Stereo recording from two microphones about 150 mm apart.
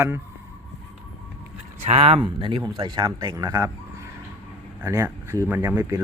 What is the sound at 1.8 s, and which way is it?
Speech, 45° right (ahead or behind).